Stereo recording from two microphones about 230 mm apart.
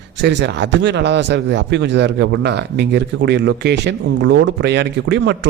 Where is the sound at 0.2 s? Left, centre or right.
Right.